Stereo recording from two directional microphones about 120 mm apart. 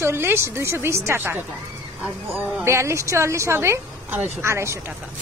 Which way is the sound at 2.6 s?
25° right (ahead or behind).